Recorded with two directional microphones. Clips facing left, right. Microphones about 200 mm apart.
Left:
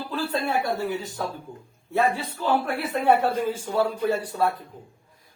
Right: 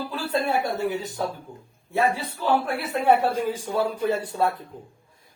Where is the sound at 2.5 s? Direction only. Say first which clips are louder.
Right 1 dB; 10° right (ahead or behind); by 4.5 s 25° right (ahead or behind).